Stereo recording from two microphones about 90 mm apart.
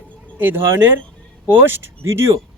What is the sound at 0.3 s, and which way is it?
A man's voice, 20° right (ahead or behind).